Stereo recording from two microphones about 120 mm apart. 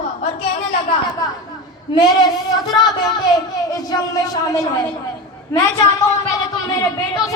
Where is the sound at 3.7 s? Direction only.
30° left (ahead or behind).